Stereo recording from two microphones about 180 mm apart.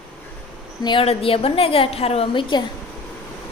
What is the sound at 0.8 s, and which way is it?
A woman's voice, 25° left (ahead or behind).